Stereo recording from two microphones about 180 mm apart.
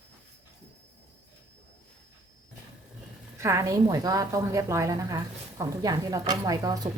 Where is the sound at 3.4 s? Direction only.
15° right (ahead or behind).